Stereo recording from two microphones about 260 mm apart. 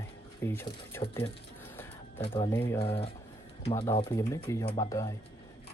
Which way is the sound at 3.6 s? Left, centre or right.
Left.